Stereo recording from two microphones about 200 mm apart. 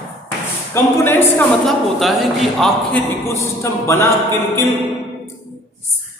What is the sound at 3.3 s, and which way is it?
Speech, 15° left (ahead or behind).